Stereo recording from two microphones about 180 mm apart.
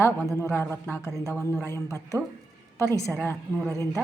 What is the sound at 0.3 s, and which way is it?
A woman's voice, 10° left (ahead or behind).